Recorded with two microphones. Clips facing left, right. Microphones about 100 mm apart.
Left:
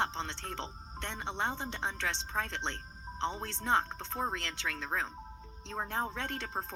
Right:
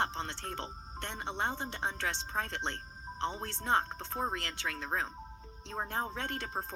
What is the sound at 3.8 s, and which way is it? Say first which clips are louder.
A woman's voice: even; 15° right (ahead or behind).